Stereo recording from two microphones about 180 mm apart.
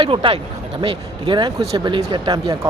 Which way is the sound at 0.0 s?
30° right (ahead or behind).